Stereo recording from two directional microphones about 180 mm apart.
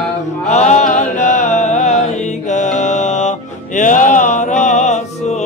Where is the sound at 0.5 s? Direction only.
40° left (ahead or behind).